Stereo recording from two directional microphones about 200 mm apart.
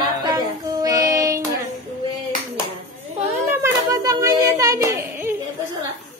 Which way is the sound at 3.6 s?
15° right (ahead or behind).